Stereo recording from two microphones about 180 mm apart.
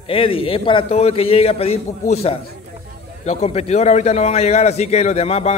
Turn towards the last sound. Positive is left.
turn(degrees=35)  # may be behind; listen again after turning